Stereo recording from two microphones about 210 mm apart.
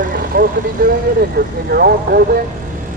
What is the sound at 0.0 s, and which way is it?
Vehicle, 40° right (ahead or behind).